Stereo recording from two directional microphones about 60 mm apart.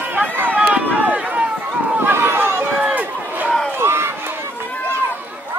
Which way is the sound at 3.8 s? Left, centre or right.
Right.